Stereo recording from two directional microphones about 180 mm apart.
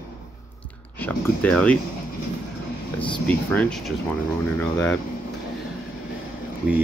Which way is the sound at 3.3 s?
5° left (ahead or behind).